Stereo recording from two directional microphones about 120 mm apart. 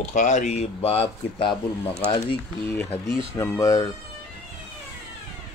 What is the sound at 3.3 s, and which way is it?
Speech, 25° left (ahead or behind).